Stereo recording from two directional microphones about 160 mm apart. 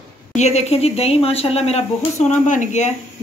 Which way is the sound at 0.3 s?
45° left (ahead or behind).